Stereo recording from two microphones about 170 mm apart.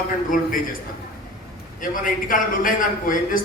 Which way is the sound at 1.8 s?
55° left (ahead or behind).